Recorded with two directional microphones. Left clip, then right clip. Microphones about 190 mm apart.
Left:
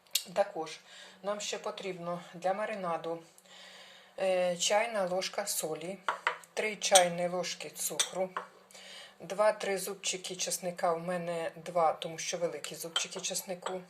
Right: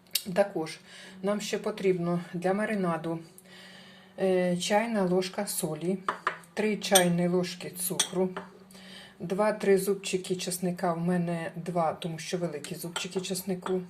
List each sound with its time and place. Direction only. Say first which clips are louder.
0.1 s speech: right 4 dB; centre (ahead or behind)
4.2 s speech: right 2 dB; 15° left (ahead or behind)